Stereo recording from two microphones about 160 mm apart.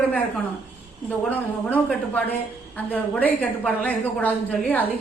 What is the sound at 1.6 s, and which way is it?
A woman's voice, 10° left (ahead or behind).